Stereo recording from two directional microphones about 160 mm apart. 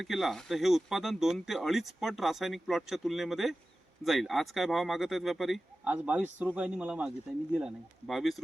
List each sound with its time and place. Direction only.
0.0 s speech: centre (ahead or behind)